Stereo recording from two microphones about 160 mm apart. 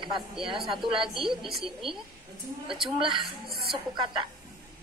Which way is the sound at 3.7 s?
30° right (ahead or behind).